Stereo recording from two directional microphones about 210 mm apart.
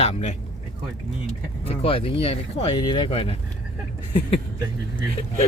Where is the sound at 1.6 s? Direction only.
30° left (ahead or behind).